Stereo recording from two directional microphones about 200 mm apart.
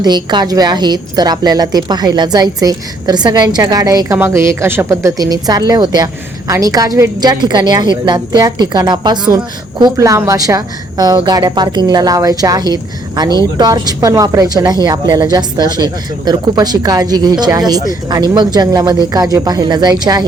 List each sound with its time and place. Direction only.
0.0 s a woman's voice: 20° right (ahead or behind)